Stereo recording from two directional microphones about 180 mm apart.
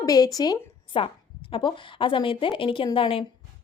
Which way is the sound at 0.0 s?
20° left (ahead or behind).